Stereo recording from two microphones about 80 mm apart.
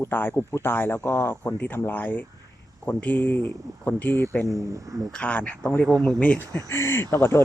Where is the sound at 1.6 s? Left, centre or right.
Left.